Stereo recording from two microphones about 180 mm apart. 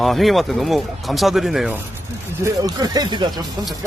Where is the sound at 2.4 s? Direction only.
20° right (ahead or behind).